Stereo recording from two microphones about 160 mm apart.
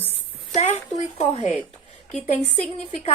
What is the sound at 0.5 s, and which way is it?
Speech, 45° left (ahead or behind).